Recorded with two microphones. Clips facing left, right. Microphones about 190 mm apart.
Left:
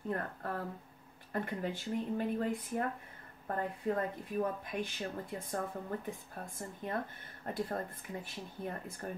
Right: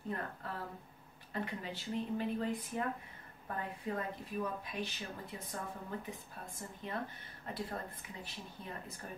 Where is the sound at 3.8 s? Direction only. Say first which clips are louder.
Left 5 dB; 50° left (ahead or behind).